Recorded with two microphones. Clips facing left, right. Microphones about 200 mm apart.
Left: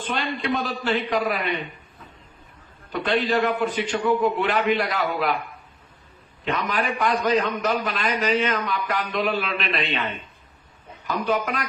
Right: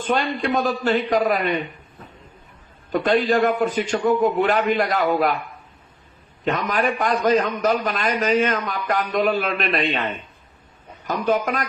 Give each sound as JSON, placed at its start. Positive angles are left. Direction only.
{"t": 0.0, "sound": "a man's voice", "side_deg": -45}
{"t": 2.9, "sound": "a man's voice", "side_deg": -45}
{"t": 6.4, "sound": "a man's voice", "side_deg": -45}